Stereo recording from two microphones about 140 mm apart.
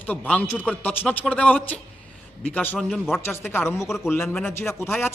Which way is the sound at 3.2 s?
15° left (ahead or behind).